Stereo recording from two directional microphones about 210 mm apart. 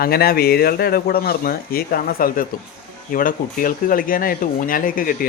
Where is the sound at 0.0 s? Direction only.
45° left (ahead or behind).